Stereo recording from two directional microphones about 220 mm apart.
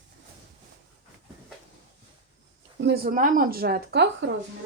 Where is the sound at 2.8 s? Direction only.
45° right (ahead or behind).